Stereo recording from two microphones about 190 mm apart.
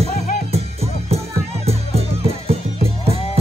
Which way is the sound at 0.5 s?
30° right (ahead or behind).